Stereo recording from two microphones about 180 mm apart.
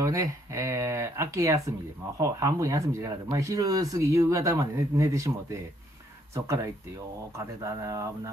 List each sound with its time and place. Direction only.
0.0 s speech: 15° right (ahead or behind)